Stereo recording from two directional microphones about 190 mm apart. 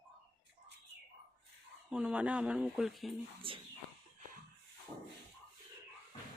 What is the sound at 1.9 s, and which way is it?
Speech, 5° right (ahead or behind).